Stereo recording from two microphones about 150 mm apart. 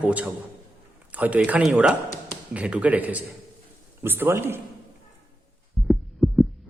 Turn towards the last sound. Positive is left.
turn(degrees=0)  # may be behind; listen again after turning